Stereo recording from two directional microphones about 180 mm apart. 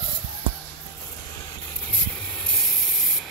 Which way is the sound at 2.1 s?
5° left (ahead or behind).